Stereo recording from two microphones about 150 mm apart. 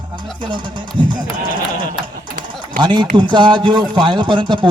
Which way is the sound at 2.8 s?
30° right (ahead or behind).